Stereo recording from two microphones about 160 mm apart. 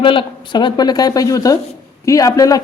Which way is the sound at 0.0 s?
30° left (ahead or behind).